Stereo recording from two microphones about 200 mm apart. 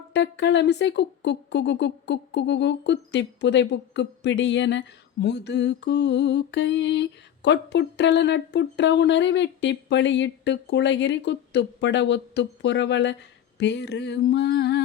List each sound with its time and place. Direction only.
0.1 s speech: 60° left (ahead or behind)